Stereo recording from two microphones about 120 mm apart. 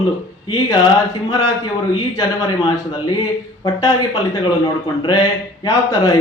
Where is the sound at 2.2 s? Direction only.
30° left (ahead or behind).